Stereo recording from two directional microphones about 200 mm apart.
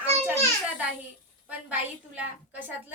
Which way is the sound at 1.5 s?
5° right (ahead or behind).